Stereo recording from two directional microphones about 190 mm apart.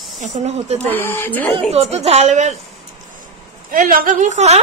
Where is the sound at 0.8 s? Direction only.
10° left (ahead or behind).